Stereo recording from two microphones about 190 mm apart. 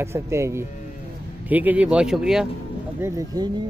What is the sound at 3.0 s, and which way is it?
Speech, 20° right (ahead or behind).